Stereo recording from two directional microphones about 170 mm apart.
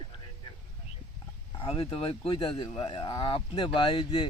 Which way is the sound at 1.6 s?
30° left (ahead or behind).